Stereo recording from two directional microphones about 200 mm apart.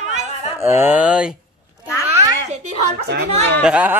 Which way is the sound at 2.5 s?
35° right (ahead or behind).